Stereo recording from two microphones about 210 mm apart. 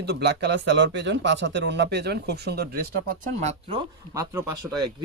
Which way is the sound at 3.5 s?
25° right (ahead or behind).